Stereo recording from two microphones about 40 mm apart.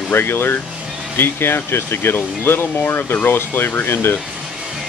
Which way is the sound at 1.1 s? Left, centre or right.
Left.